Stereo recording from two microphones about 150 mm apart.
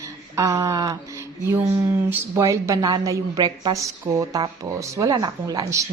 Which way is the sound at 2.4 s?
20° right (ahead or behind).